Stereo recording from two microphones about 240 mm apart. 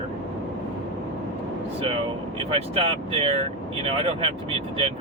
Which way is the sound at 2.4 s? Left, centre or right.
Right.